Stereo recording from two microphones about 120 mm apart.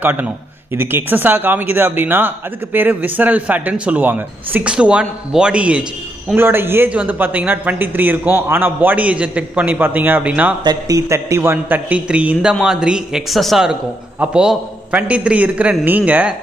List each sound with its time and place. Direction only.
0.0 s speech: 15° right (ahead or behind)
10.6 s a man's voice: 35° right (ahead or behind); by 16.3 s 15° right (ahead or behind)